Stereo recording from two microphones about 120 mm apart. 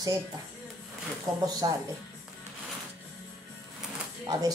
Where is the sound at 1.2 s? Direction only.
30° right (ahead or behind).